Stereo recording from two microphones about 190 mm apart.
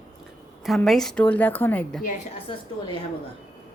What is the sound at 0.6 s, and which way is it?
A woman's voice, centre (ahead or behind).